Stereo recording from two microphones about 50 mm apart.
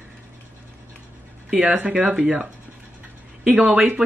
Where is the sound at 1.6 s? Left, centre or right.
Right.